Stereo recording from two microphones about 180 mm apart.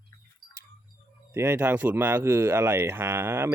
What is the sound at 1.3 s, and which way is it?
Speech, 15° right (ahead or behind).